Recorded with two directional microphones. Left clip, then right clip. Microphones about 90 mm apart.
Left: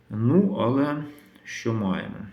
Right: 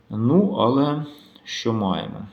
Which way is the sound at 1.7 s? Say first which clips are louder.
Right 4 dB; 25° left (ahead or behind).